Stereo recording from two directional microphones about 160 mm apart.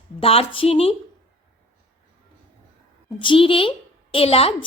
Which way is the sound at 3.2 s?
30° left (ahead or behind).